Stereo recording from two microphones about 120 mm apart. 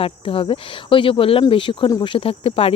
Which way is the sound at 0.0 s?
50° left (ahead or behind).